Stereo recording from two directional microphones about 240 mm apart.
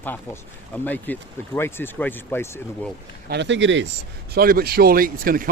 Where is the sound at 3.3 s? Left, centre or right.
Right.